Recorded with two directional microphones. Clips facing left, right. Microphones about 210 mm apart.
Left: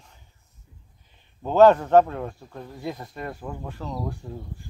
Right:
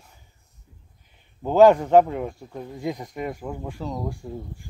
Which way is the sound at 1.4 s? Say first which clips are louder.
Right 1 dB; 10° right (ahead or behind).